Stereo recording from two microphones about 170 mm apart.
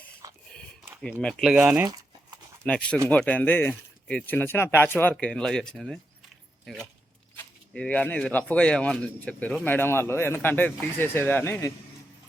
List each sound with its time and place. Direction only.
1.2 s speech: centre (ahead or behind)
1.9 s crumpling: 20° right (ahead or behind)
2.6 s speech: 5° left (ahead or behind)
7.3 s speech: 5° left (ahead or behind)